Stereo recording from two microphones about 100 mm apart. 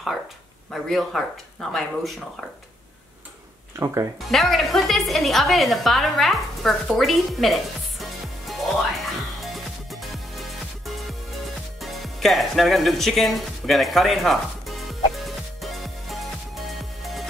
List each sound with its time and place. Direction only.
0.7 s speech: centre (ahead or behind)
3.8 s speech: 30° right (ahead or behind)
4.2 s music: centre (ahead or behind)